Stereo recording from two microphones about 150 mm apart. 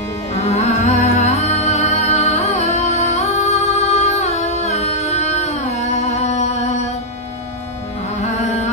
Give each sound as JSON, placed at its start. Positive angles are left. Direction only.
{"t": 0.3, "sound": "music", "side_deg": 50}
{"t": 8.2, "sound": "music", "side_deg": 50}